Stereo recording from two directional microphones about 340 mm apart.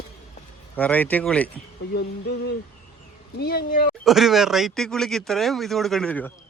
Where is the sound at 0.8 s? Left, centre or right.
Centre.